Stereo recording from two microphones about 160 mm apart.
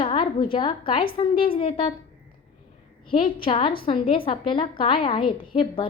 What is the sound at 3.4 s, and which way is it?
A woman's voice, 35° left (ahead or behind).